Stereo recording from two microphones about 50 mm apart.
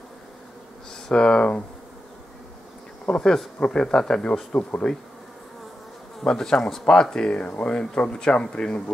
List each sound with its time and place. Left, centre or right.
1.0 s speech: centre
3.1 s speech: centre
6.2 s a man's voice: centre